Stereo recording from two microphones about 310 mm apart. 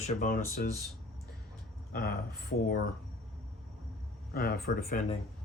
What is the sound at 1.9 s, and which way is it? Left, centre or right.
Speech, left.